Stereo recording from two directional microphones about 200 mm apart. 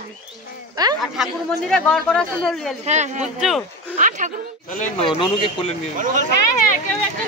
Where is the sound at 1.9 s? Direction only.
5° left (ahead or behind).